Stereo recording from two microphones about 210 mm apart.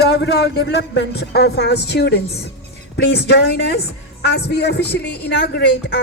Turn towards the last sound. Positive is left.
turn(degrees=50)  # may be behind; listen again after turning